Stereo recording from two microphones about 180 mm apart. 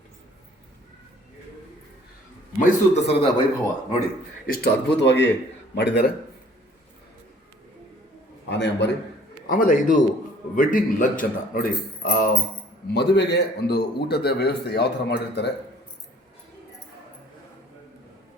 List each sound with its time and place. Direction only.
2.6 s a man's voice: 35° left (ahead or behind)
4.5 s speech: 65° left (ahead or behind)
8.4 s a man's voice: 75° left (ahead or behind)
9.5 s speech: 50° left (ahead or behind)
12.9 s a man's voice: 70° left (ahead or behind)